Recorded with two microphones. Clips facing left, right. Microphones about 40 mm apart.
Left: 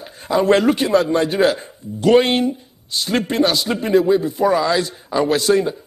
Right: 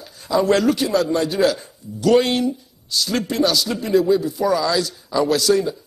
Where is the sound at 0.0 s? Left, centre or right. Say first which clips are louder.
Left 2 dB; left.